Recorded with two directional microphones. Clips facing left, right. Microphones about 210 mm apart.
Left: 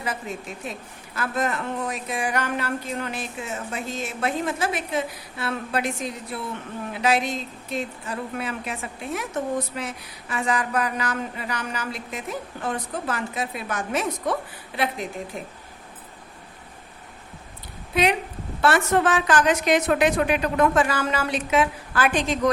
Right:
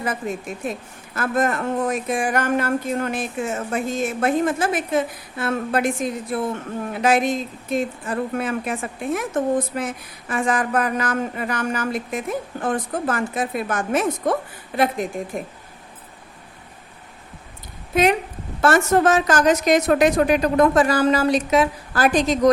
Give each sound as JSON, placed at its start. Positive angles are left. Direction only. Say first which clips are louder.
{"t": 0.0, "sound": "speech", "louder": "right 5 dB", "side_deg": -50}
{"t": 17.9, "sound": "a woman's voice", "louder": "right 4 dB", "side_deg": -45}